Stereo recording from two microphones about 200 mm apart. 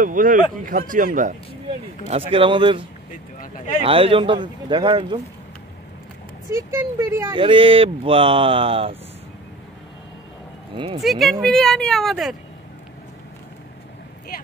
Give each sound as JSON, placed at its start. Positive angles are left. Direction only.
{"t": 0.0, "sound": "a man's voice", "side_deg": -40}
{"t": 2.0, "sound": "speech", "side_deg": -30}
{"t": 3.1, "sound": "speech", "side_deg": 40}
{"t": 3.8, "sound": "speech", "side_deg": -25}
{"t": 6.5, "sound": "speech", "side_deg": -15}
{"t": 7.3, "sound": "speech", "side_deg": -25}
{"t": 11.0, "sound": "speech", "side_deg": 0}